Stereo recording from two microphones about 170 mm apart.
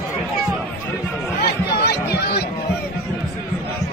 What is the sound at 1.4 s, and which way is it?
Chatter, 70° left (ahead or behind).